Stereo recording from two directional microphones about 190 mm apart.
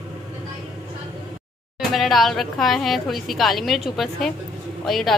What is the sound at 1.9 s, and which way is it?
A woman's voice, centre (ahead or behind).